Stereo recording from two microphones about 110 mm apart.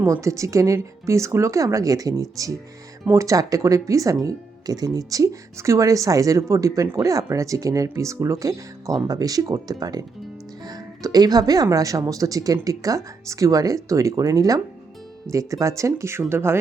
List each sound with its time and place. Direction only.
0.0 s speech: 25° right (ahead or behind)